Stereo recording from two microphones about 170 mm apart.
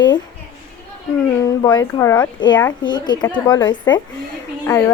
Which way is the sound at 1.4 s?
20° left (ahead or behind).